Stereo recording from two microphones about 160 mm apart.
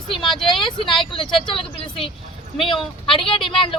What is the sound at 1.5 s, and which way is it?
Speech, 35° left (ahead or behind).